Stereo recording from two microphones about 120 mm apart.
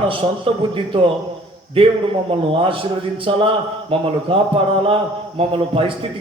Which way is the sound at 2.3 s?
50° right (ahead or behind).